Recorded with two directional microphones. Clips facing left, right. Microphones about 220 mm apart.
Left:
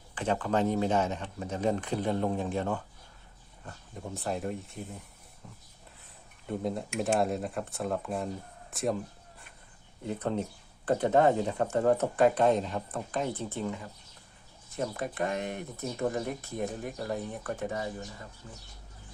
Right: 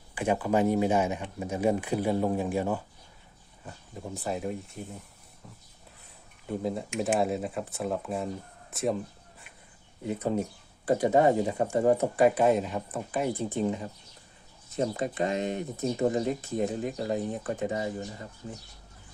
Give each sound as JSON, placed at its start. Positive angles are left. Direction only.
{"t": 0.1, "sound": "speech", "side_deg": -10}
{"t": 6.5, "sound": "speech", "side_deg": 0}
{"t": 10.0, "sound": "speech", "side_deg": -10}
{"t": 18.4, "sound": "speech", "side_deg": -30}